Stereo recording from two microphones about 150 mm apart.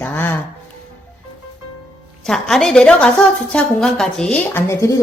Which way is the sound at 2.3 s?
5° left (ahead or behind).